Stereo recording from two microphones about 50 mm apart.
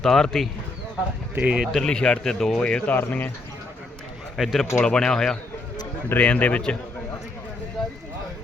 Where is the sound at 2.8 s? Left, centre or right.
Left.